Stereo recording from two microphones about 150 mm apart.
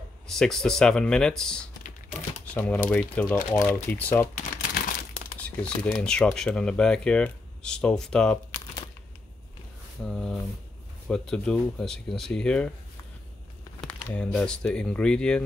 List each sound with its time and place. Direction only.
0.3 s speech: 5° left (ahead or behind)
4.4 s crumpling: 65° left (ahead or behind)
5.9 s speech: 5° left (ahead or behind)
10.0 s speech: 5° left (ahead or behind)
14.1 s speech: 5° left (ahead or behind)